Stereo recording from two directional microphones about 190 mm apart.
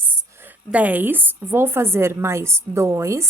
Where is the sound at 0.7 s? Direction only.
10° right (ahead or behind).